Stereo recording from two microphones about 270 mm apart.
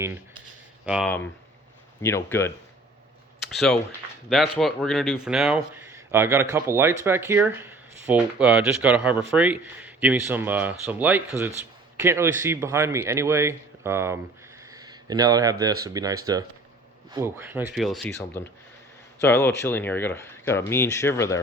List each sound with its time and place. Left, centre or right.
0.9 s speech: centre
2.0 s speech: centre